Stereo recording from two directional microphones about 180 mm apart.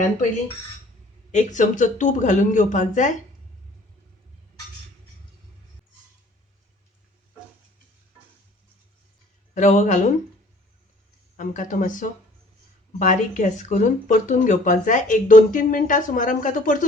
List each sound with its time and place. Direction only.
1.3 s speech: 40° left (ahead or behind)
9.6 s speech: 40° left (ahead or behind)
11.3 s speech: 45° left (ahead or behind)